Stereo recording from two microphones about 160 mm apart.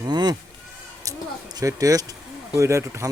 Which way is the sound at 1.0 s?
25° right (ahead or behind).